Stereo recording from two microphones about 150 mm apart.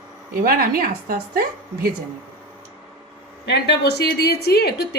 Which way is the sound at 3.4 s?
90° left.